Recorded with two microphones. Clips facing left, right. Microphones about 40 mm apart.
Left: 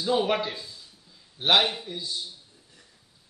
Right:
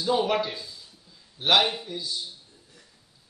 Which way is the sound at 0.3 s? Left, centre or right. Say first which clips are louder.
Right 1 dB; centre.